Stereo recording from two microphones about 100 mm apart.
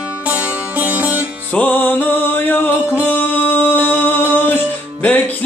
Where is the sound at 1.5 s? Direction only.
20° left (ahead or behind).